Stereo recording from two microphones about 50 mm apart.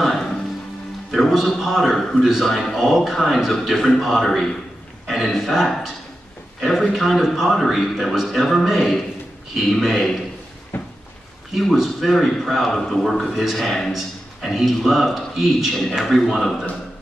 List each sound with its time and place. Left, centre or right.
1.1 s a man's voice: centre
10.7 s a sound: left
11.5 s a man's voice: centre